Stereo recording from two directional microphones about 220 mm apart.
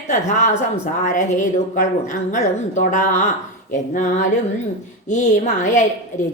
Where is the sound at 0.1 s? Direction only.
35° left (ahead or behind).